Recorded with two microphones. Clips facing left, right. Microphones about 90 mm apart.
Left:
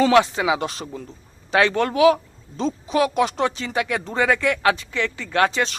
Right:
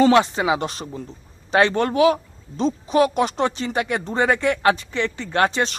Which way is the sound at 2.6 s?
40° right (ahead or behind).